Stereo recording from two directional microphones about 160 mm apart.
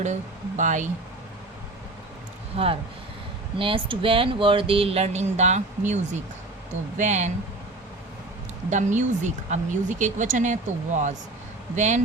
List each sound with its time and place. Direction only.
0.0 s speech: 50° right (ahead or behind)
3.6 s speech: 35° right (ahead or behind); by 7.3 s 50° right (ahead or behind)
8.7 s speech: 50° right (ahead or behind)